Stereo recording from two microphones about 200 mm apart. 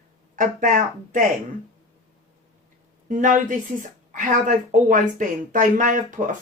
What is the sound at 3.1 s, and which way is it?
Speech, 40° right (ahead or behind).